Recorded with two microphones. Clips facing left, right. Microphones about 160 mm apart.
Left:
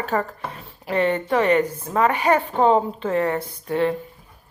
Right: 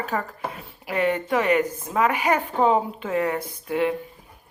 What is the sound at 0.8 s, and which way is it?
Speech, 10° right (ahead or behind).